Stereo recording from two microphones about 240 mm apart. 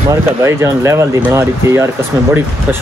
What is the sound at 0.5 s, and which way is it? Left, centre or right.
Speech, centre.